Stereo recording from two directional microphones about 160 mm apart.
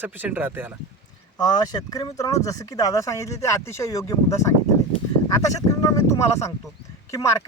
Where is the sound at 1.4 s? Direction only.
25° left (ahead or behind).